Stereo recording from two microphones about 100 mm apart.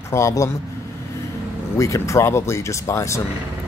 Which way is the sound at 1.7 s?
30° left (ahead or behind).